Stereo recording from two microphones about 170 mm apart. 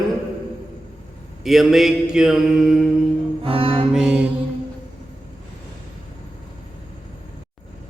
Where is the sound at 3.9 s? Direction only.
5° right (ahead or behind).